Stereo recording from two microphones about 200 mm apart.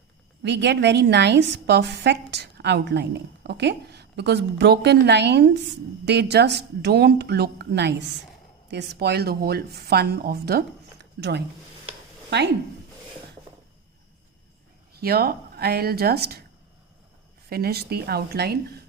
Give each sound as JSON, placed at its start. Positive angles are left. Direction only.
{"t": 0.4, "sound": "a woman's voice", "side_deg": -60}
{"t": 15.0, "sound": "speech", "side_deg": -50}
{"t": 17.5, "sound": "speech", "side_deg": -50}